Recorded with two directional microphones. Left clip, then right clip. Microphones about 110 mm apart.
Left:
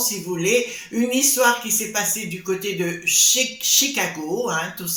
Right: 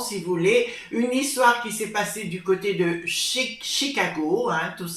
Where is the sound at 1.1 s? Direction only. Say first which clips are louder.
Left 1 dB; 15° left (ahead or behind).